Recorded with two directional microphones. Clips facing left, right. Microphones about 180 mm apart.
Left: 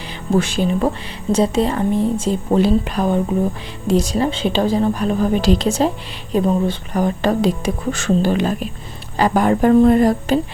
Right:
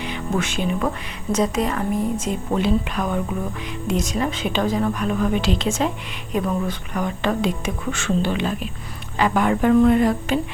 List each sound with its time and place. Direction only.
0.0 s speech: 35° left (ahead or behind)